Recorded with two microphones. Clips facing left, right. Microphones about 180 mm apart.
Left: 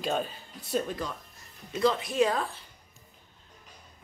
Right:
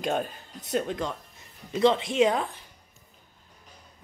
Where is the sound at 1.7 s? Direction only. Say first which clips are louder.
Right 3 dB; 25° right (ahead or behind).